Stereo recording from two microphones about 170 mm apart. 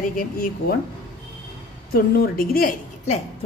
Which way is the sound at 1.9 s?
60° left (ahead or behind).